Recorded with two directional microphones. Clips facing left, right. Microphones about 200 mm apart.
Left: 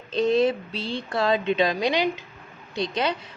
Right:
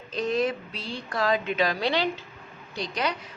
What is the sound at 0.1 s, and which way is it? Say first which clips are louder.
A woman's voice: left 5 dB; 25° left (ahead or behind).